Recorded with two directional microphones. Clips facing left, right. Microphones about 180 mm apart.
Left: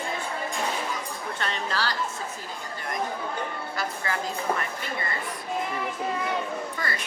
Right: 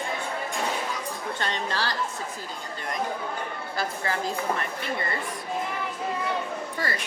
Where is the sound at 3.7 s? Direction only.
30° right (ahead or behind).